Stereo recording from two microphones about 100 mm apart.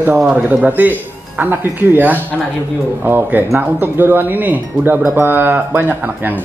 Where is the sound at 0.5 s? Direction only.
20° right (ahead or behind).